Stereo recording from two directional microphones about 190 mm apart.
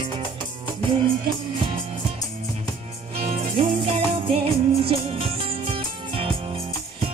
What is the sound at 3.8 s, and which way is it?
Music, 30° right (ahead or behind).